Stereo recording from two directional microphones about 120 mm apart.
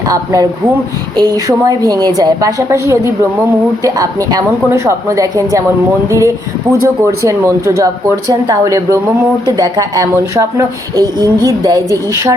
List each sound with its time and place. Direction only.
0.1 s speech: 30° right (ahead or behind)